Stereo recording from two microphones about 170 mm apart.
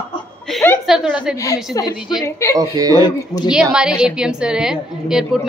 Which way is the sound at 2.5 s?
20° right (ahead or behind).